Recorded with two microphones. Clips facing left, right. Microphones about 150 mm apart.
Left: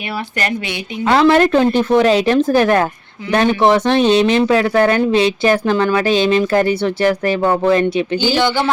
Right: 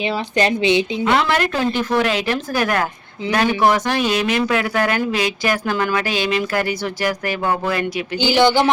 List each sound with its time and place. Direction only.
0.3 s speech: 20° right (ahead or behind)
1.0 s speech: 30° left (ahead or behind)
8.2 s speech: 15° right (ahead or behind)